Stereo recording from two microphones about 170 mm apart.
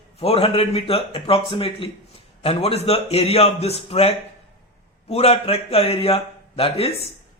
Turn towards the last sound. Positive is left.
turn(degrees=35)  # may be behind; listen again after turning